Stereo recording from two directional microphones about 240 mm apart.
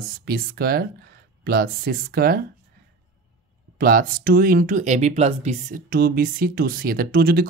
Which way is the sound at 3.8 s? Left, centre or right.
Right.